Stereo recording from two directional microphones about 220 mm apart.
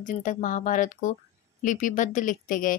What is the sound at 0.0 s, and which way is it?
A woman's voice, 35° left (ahead or behind).